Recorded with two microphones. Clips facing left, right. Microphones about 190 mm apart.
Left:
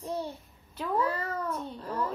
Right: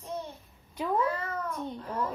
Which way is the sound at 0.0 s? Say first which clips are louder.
Left 3 dB; 35° left (ahead or behind).